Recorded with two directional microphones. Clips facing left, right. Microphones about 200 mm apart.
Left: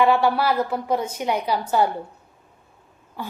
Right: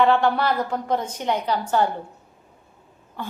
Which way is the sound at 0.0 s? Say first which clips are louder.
Even; 10° left (ahead or behind).